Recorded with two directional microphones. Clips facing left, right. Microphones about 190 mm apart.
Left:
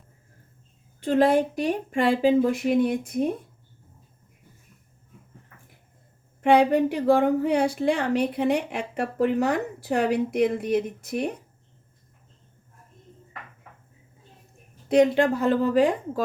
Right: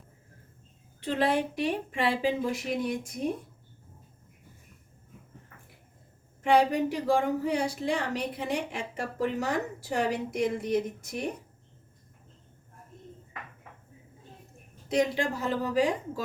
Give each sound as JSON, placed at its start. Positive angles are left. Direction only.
{"t": 1.0, "sound": "a woman's voice", "side_deg": 45}
{"t": 6.4, "sound": "a woman's voice", "side_deg": 60}
{"t": 14.8, "sound": "a woman's voice", "side_deg": 60}